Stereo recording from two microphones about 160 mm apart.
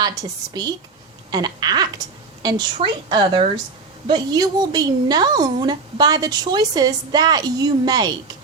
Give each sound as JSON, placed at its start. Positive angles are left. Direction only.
{"t": 0.0, "sound": "speech", "side_deg": -25}